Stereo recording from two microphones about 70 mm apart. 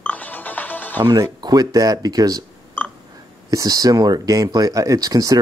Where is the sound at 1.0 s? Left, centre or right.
Right.